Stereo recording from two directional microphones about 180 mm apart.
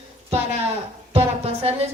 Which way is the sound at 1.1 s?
35° right (ahead or behind).